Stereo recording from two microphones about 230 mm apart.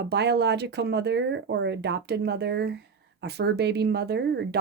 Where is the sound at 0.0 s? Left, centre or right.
Right.